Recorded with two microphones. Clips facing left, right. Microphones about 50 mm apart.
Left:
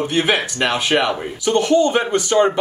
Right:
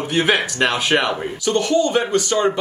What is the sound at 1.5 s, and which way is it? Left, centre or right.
Speech, left.